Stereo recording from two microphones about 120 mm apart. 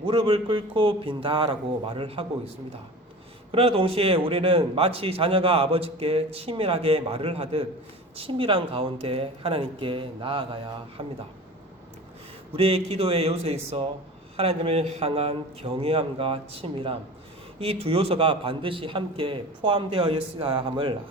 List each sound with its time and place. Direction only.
0.0 s a man's voice: 45° right (ahead or behind)
3.5 s a man's voice: 50° right (ahead or behind)
12.5 s a man's voice: 55° right (ahead or behind)